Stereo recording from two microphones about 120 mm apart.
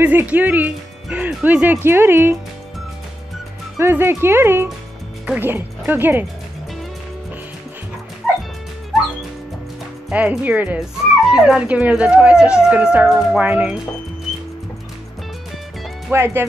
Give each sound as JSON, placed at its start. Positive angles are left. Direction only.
{"t": 0.0, "sound": "speech", "side_deg": -15}
{"t": 3.7, "sound": "speech", "side_deg": -20}
{"t": 10.0, "sound": "speech", "side_deg": -5}
{"t": 16.1, "sound": "speech", "side_deg": -20}